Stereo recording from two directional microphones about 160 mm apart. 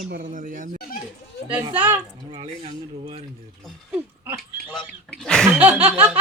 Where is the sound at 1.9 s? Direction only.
35° right (ahead or behind).